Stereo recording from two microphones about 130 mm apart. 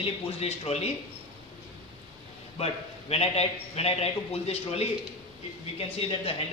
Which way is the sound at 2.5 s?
50° left (ahead or behind).